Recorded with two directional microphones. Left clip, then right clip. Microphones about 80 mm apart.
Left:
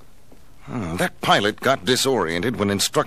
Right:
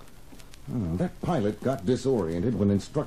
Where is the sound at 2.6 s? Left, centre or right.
Left.